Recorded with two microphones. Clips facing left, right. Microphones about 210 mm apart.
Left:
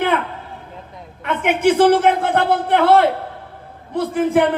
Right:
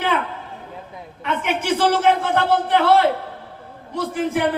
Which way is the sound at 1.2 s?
55° left (ahead or behind).